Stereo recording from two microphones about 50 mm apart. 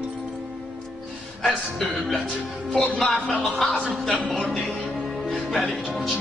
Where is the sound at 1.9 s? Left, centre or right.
Centre.